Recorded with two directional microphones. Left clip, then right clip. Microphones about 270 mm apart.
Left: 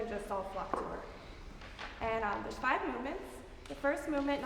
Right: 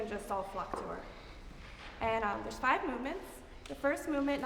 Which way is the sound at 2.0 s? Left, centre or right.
Right.